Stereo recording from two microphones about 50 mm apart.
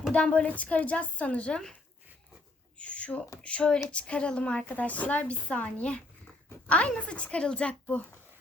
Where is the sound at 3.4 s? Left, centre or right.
Centre.